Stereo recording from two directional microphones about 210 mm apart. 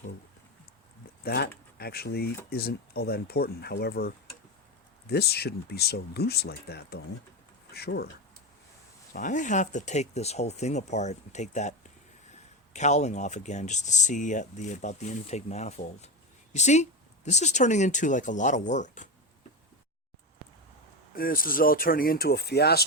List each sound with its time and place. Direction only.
1.2 s speech: 50° left (ahead or behind)
9.1 s speech: 35° left (ahead or behind)
12.7 s speech: 35° left (ahead or behind)
20.4 s a sound: 10° left (ahead or behind)
21.2 s speech: 45° left (ahead or behind)